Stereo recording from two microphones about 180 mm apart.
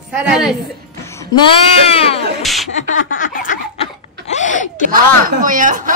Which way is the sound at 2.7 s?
45° left (ahead or behind).